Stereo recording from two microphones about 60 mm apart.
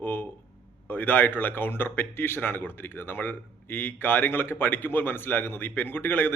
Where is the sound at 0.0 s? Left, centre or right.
Left.